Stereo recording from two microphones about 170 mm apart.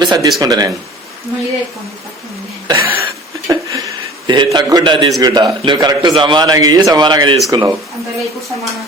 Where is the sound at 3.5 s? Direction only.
20° right (ahead or behind).